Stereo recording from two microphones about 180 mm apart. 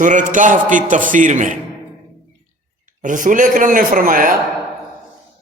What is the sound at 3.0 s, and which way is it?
A man's voice, 45° right (ahead or behind).